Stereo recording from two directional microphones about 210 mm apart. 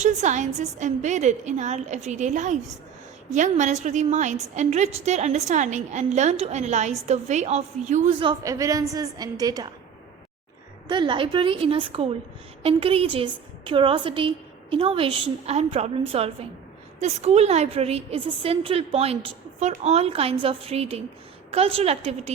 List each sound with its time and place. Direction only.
0.0 s a woman's voice: 35° right (ahead or behind)
8.3 s a woman's voice: 15° right (ahead or behind)
10.8 s a woman's voice: 20° right (ahead or behind)